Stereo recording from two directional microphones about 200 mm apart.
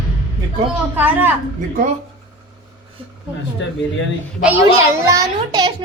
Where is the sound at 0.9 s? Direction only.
10° right (ahead or behind).